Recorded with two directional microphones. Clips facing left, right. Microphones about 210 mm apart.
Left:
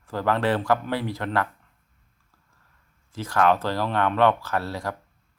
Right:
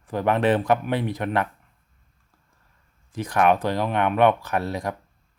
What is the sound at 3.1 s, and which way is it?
Speech, 15° right (ahead or behind).